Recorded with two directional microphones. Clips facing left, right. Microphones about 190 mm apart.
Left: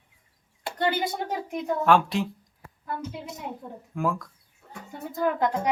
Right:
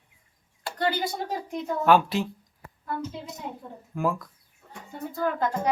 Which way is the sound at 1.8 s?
Centre (ahead or behind).